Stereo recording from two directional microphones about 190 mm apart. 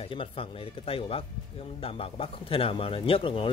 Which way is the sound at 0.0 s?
30° left (ahead or behind).